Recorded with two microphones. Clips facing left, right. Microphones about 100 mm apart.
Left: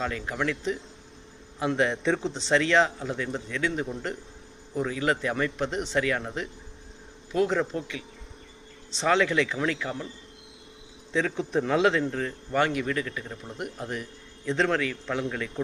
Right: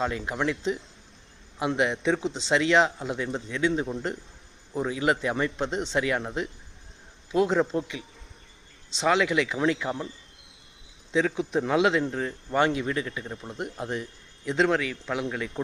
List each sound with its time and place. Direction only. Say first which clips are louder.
0.0 s a man's voice: right 2 dB; 20° right (ahead or behind)
11.1 s speech: right 1 dB; 10° right (ahead or behind)
12.5 s a man's voice: right 1 dB; 20° right (ahead or behind)